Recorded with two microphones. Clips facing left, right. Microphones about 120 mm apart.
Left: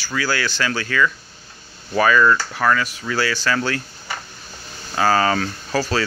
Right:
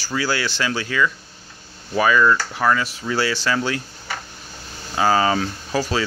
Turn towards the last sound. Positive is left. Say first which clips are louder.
# left 1 dB
turn(degrees=-15)  # may be behind; listen again after turning